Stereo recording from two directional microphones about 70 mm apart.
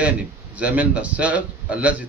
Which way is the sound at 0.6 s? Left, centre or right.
Centre.